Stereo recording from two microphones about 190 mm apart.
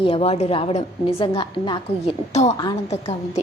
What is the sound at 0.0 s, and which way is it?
A woman's voice, 30° left (ahead or behind).